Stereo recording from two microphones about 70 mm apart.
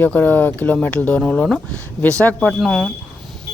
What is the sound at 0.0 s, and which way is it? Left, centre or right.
Speech, left.